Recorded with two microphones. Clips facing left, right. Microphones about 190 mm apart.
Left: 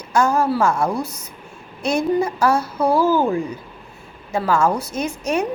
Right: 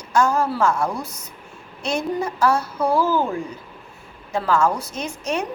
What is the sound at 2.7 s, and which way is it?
Speech, 30° left (ahead or behind).